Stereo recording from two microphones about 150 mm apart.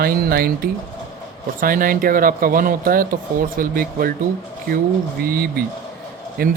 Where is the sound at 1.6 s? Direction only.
70° right (ahead or behind).